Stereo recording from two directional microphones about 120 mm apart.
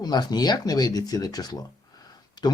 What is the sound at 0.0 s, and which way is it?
Speech, 35° left (ahead or behind).